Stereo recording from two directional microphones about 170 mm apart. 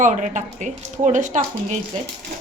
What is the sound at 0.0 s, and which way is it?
Speech, 50° right (ahead or behind).